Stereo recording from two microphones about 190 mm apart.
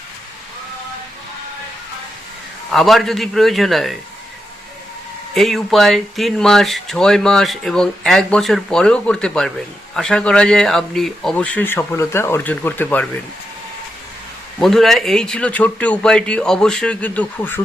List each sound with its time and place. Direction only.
2.6 s speech: centre (ahead or behind)
5.3 s speech: centre (ahead or behind)
14.6 s speech: centre (ahead or behind)